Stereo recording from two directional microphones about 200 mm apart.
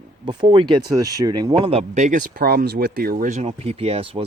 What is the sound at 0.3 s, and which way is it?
Speech, 25° right (ahead or behind).